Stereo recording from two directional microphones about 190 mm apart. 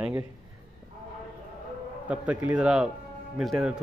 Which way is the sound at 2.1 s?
10° right (ahead or behind).